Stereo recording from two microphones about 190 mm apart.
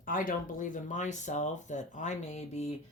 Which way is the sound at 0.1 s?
45° left (ahead or behind).